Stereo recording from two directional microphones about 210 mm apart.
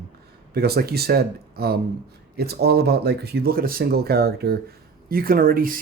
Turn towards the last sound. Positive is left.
turn(degrees=-45)  # may be behind; listen again after turning